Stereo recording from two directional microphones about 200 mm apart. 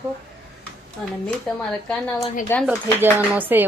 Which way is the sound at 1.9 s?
10° left (ahead or behind).